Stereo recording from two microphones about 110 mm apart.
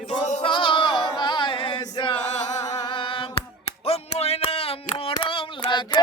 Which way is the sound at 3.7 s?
65° left (ahead or behind).